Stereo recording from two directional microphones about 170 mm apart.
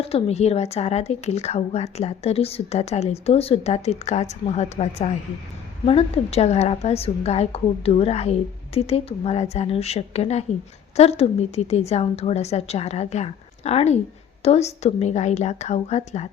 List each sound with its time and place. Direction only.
0.0 s a woman's voice: 35° left (ahead or behind)